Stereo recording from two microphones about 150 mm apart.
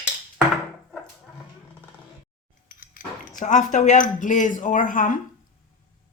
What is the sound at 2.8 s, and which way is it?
Speech, 65° left (ahead or behind).